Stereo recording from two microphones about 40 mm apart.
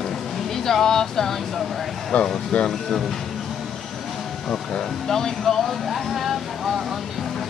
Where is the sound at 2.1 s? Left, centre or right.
Left.